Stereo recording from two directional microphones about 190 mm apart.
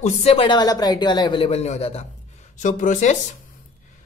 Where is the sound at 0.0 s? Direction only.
35° left (ahead or behind).